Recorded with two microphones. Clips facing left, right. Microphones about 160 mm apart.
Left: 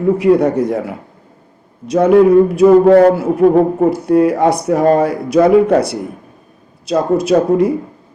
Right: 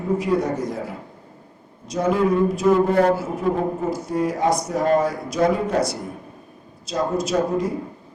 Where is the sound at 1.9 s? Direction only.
65° left (ahead or behind).